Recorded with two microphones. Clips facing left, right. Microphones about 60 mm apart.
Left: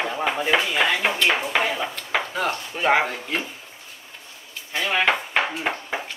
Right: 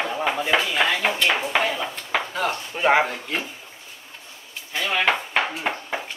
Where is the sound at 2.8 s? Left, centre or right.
Centre.